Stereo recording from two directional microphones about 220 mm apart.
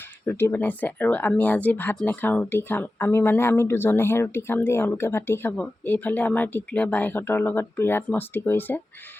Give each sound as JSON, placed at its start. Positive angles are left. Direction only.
{"t": 0.3, "sound": "speech", "side_deg": 10}